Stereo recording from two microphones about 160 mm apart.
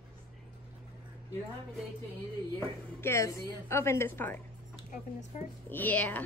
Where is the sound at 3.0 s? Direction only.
15° left (ahead or behind).